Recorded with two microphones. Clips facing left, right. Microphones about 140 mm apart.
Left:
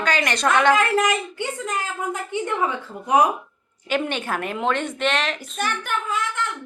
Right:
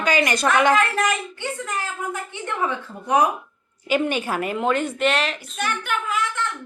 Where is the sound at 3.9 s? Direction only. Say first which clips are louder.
Right 2 dB; 5° right (ahead or behind).